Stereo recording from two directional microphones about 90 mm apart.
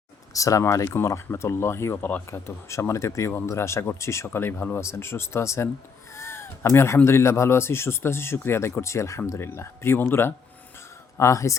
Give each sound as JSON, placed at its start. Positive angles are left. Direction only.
{"t": 0.3, "sound": "speech", "side_deg": 40}
{"t": 2.6, "sound": "speech", "side_deg": 35}